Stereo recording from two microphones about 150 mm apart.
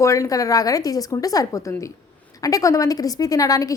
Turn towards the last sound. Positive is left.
turn(degrees=25)  # may be behind; listen again after turning